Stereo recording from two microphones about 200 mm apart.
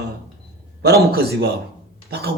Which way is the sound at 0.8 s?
50° right (ahead or behind).